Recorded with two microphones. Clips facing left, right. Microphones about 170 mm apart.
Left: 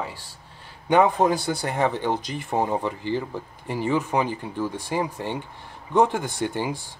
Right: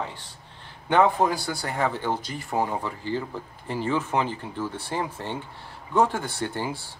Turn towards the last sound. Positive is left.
turn(degrees=15)  # may be behind; listen again after turning